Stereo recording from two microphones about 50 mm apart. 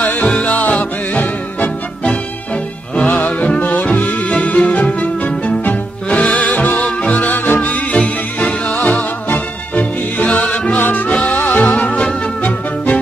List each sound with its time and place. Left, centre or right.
0.2 s music: left
6.0 s music: left
10.8 s music: left
11.1 s music: left